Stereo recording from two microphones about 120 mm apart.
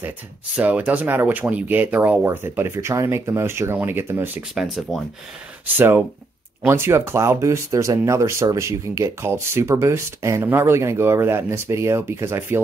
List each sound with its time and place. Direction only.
0.6 s speech: 15° right (ahead or behind)
4.4 s speech: centre (ahead or behind)
5.7 s speech: 15° right (ahead or behind)